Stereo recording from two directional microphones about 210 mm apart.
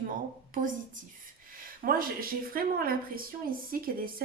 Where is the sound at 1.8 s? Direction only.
45° right (ahead or behind).